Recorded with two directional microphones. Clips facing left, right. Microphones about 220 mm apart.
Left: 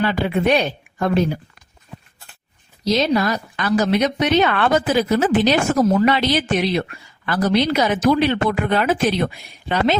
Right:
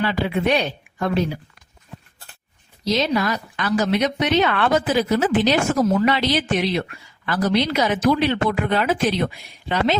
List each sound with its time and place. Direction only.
0.0 s speech: 45° left (ahead or behind)
2.8 s speech: 40° left (ahead or behind)